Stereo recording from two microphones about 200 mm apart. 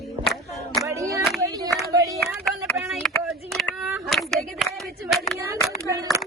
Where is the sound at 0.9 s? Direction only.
15° right (ahead or behind).